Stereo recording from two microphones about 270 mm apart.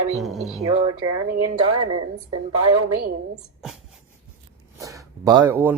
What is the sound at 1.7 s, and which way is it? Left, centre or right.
Speech, right.